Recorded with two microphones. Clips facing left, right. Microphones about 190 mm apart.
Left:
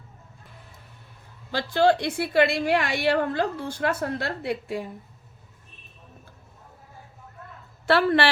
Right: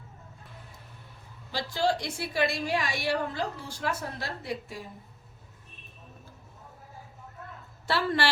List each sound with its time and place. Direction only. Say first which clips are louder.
1.5 s a woman's voice: left 7 dB; 60° left (ahead or behind)
7.9 s a woman's voice: left 7 dB; 60° left (ahead or behind)